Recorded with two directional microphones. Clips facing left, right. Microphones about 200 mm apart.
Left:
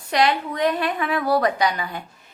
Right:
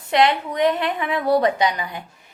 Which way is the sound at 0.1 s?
20° right (ahead or behind).